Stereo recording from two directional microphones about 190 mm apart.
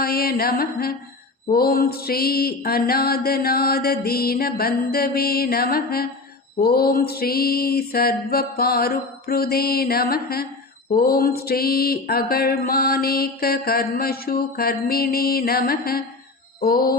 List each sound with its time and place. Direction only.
0.0 s mantra: 50° left (ahead or behind)